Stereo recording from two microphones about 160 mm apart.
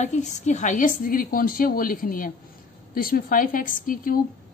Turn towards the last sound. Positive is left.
turn(degrees=60)  # may be behind; listen again after turning